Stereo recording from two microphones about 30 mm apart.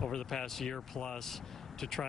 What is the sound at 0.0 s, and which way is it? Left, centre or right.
A woman's voice, centre.